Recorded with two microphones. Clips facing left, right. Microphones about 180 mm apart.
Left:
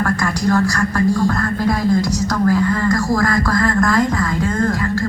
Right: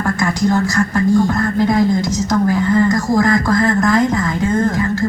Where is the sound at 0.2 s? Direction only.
20° right (ahead or behind).